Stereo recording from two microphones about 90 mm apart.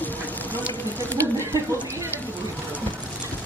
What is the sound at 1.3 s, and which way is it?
Speech, 25° right (ahead or behind).